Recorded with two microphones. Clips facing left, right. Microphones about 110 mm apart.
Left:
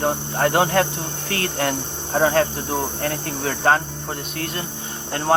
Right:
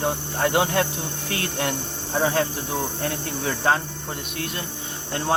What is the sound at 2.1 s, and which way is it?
Speech, 50° left (ahead or behind).